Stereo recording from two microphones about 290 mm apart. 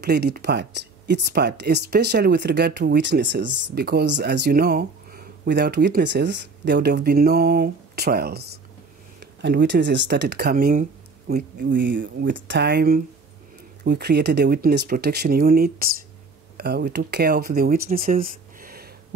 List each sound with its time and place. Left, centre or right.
0.0 s speech: right